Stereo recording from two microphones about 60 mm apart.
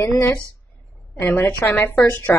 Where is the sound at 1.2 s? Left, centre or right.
Left.